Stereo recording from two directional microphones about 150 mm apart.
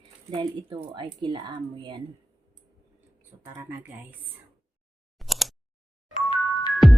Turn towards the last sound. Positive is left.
turn(degrees=0)  # may be behind; listen again after turning